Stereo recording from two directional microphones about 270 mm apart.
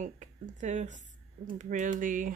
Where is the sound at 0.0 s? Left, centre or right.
Right.